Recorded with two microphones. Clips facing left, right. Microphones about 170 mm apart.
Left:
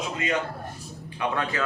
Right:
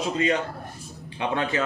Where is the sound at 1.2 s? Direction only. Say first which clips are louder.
Right 2 dB; 25° right (ahead or behind).